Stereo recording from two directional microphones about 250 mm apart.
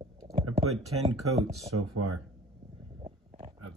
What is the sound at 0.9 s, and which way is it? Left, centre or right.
Speech, right.